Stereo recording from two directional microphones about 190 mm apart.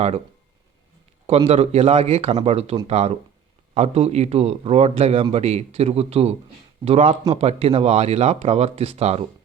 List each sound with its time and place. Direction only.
1.5 s a man's voice: 35° right (ahead or behind)